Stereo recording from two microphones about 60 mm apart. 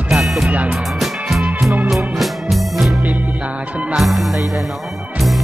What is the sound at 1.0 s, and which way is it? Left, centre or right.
Music, centre.